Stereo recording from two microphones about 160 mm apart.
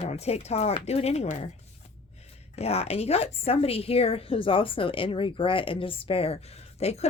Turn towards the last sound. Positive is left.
turn(degrees=40)  # may be behind; listen again after turning